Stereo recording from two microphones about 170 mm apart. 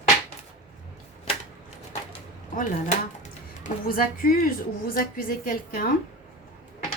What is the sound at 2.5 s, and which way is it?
Speech, 45° left (ahead or behind).